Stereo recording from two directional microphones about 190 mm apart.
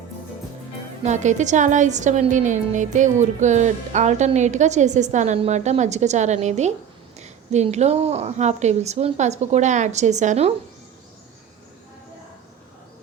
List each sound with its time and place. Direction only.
1.0 s a woman's voice: 40° right (ahead or behind)